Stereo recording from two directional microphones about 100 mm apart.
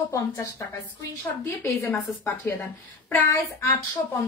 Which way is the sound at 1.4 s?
20° left (ahead or behind).